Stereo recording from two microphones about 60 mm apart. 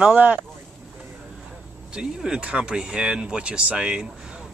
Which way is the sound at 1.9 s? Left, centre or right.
Centre.